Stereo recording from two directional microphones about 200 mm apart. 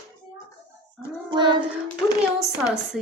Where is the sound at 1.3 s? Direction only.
20° right (ahead or behind).